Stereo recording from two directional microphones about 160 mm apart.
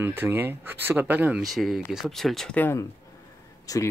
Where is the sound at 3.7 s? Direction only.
20° left (ahead or behind).